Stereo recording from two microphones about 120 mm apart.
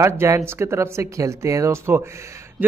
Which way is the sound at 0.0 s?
25° right (ahead or behind).